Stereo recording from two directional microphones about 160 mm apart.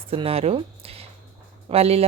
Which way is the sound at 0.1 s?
35° right (ahead or behind).